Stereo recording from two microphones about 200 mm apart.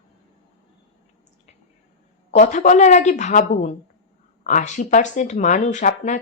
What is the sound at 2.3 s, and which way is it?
Speech, 40° left (ahead or behind).